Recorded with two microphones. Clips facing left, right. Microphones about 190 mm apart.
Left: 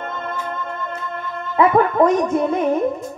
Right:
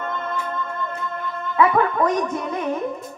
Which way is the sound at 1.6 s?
30° left (ahead or behind).